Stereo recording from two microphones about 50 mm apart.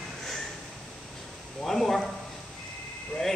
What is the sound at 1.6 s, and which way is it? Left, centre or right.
Speech, centre.